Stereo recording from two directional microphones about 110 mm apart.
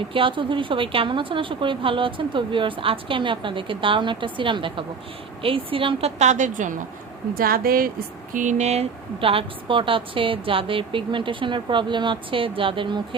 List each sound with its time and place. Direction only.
0.1 s a woman's voice: 50° right (ahead or behind); by 6.4 s 90° right
8.4 s a woman's voice: 90° right; by 13.0 s 50° right (ahead or behind)